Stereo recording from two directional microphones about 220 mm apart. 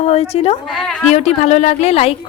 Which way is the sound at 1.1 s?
30° left (ahead or behind).